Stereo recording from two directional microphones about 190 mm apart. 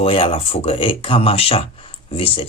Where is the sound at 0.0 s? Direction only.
30° left (ahead or behind).